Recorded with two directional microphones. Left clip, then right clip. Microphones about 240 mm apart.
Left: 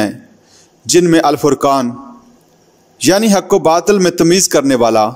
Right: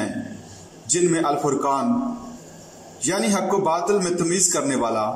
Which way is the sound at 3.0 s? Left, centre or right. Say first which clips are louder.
Left 11 dB; left.